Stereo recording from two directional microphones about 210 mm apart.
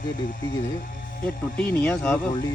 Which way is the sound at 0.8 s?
40° left (ahead or behind).